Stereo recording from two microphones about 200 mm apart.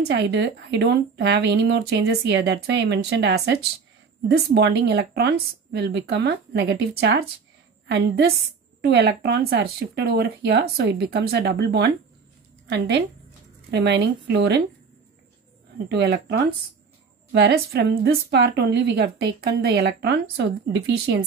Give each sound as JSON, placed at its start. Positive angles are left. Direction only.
{"t": 0.0, "sound": "a woman's voice", "side_deg": -55}
{"t": 8.8, "sound": "a woman's voice", "side_deg": -55}
{"t": 15.9, "sound": "a woman's voice", "side_deg": -55}